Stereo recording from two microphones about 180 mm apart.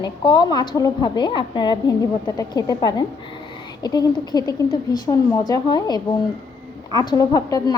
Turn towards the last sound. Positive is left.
turn(degrees=20)  # may be behind; listen again after turning